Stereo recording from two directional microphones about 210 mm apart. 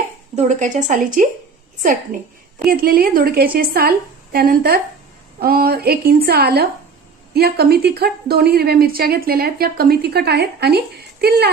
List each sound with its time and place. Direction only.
0.3 s a woman's voice: 35° right (ahead or behind)
2.6 s a woman's voice: 45° right (ahead or behind)